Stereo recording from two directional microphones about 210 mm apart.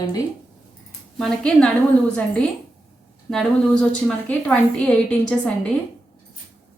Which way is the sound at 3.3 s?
5° left (ahead or behind).